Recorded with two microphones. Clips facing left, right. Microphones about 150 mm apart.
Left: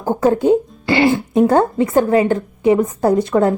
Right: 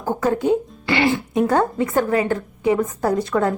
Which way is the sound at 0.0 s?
30° left (ahead or behind).